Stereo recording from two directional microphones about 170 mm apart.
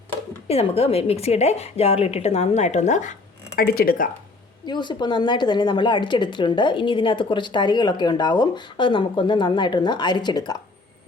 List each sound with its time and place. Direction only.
0.4 s a woman's voice: 35° left (ahead or behind)
3.5 s speech: 65° left (ahead or behind)
4.6 s a woman's voice: 25° left (ahead or behind)